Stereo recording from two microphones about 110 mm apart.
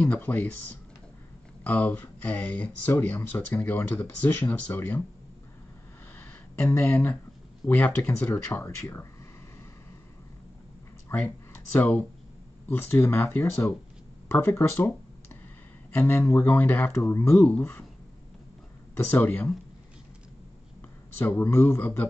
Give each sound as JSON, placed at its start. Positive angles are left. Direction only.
{"t": 0.0, "sound": "speech", "side_deg": 15}
{"t": 6.1, "sound": "a sound", "side_deg": 20}
{"t": 7.6, "sound": "speech", "side_deg": 15}
{"t": 11.1, "sound": "speech", "side_deg": 15}
{"t": 15.9, "sound": "speech", "side_deg": 20}
{"t": 19.0, "sound": "speech", "side_deg": 15}
{"t": 21.2, "sound": "speech", "side_deg": 20}